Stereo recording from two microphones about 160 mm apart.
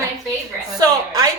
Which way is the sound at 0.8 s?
25° right (ahead or behind).